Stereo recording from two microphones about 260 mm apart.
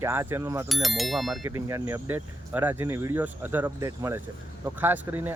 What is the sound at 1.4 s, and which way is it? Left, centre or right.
Speech, centre.